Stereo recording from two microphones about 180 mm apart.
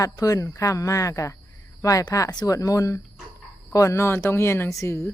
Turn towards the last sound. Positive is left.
turn(degrees=15)  # may be behind; listen again after turning